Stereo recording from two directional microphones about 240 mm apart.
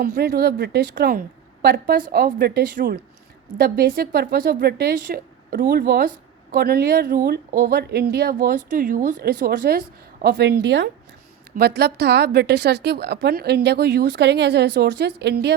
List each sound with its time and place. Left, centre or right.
0.0 s a woman's voice: right